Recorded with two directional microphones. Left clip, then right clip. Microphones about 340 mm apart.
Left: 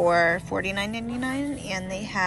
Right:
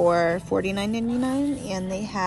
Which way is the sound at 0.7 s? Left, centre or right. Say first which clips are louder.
Right 2 dB; centre.